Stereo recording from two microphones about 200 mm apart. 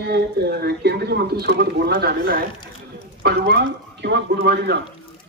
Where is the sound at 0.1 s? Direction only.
55° right (ahead or behind).